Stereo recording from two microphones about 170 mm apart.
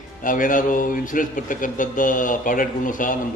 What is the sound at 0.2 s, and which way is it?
Speech, 50° left (ahead or behind).